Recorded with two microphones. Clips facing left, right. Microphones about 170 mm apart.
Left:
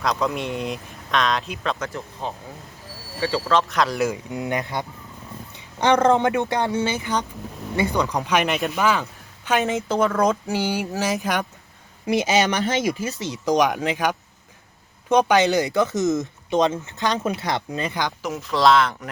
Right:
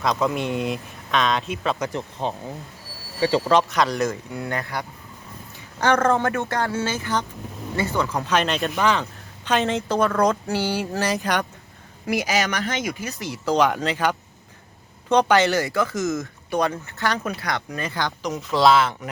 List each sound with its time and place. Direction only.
0.0 s speech: centre (ahead or behind)
1.9 s speech: 20° right (ahead or behind)
3.7 s speech: centre (ahead or behind)
4.3 s speech: 20° left (ahead or behind)
12.0 s speech: 25° left (ahead or behind)
18.3 s speech: centre (ahead or behind)